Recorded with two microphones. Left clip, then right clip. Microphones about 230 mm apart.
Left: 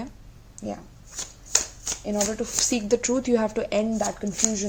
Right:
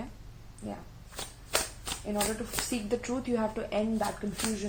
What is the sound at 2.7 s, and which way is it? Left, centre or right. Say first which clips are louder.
A woman's voice: left 9 dB; left.